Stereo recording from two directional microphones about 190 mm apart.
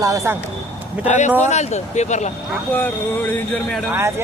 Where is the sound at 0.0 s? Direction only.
15° right (ahead or behind).